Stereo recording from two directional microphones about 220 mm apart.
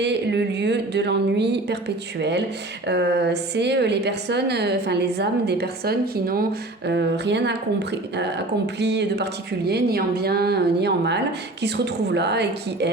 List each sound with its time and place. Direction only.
0.0 s speech: 50° right (ahead or behind)
2.8 s a woman's voice: 50° right (ahead or behind)